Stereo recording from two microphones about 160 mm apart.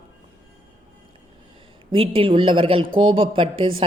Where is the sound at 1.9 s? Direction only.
35° right (ahead or behind).